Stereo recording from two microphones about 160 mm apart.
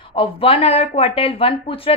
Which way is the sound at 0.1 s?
35° left (ahead or behind).